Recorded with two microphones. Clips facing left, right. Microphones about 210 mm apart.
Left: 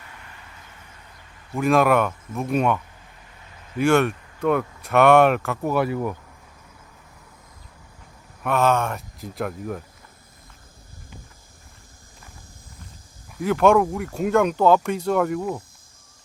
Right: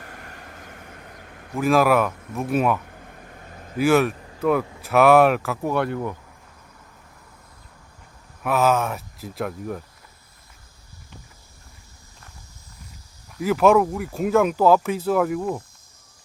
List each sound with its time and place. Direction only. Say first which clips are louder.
0.0 s vehicle: right 5 dB; 50° right (ahead or behind)
1.5 s speech: even; centre (ahead or behind)
2.8 s a sound: right 7 dB; 55° right (ahead or behind)
3.8 s speech: even; 5° right (ahead or behind)
8.4 s speech: even; 5° right (ahead or behind)
13.3 s speech: even; 5° right (ahead or behind)